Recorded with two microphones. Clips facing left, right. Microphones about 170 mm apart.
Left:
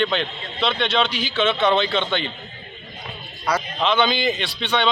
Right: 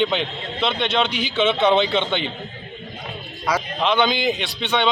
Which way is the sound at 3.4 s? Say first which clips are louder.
Even; 10° right (ahead or behind).